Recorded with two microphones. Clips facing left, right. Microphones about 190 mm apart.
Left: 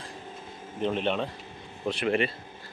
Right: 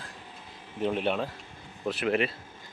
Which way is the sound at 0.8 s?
10° right (ahead or behind).